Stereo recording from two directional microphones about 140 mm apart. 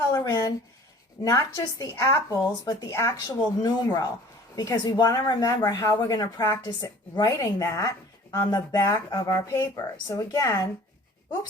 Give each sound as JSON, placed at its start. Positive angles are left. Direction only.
{"t": 0.1, "sound": "speech", "side_deg": 25}